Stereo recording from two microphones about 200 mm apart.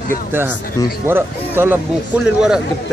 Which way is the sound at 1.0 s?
10° right (ahead or behind).